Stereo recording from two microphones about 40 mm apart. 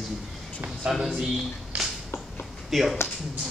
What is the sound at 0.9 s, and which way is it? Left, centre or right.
Speech, centre.